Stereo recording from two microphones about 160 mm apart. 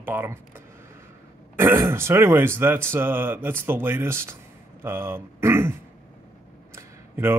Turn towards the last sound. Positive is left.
turn(degrees=-15)  # may be behind; listen again after turning